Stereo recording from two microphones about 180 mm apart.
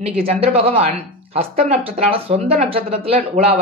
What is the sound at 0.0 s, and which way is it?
Speech, 35° right (ahead or behind).